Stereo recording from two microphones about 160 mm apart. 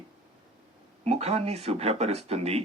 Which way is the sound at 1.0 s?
40° right (ahead or behind).